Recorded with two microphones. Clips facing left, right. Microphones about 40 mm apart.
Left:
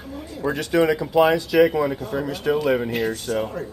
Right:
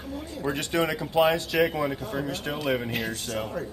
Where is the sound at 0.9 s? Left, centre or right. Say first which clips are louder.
Left 5 dB; left.